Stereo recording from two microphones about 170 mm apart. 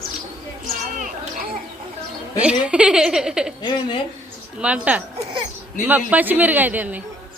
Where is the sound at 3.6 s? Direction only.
25° left (ahead or behind).